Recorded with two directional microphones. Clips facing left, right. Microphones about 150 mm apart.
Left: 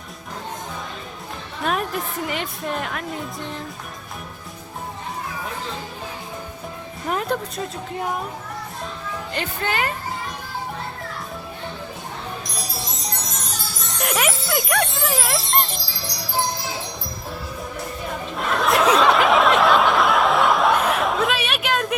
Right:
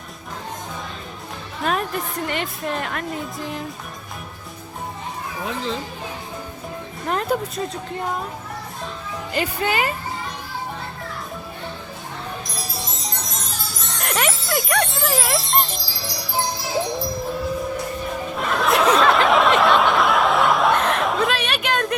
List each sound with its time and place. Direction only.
1.6 s a woman's voice: centre (ahead or behind)
7.1 s a woman's voice: centre (ahead or behind)
9.3 s a woman's voice: 5° right (ahead or behind)
14.0 s music: centre (ahead or behind)
18.3 s snicker: centre (ahead or behind)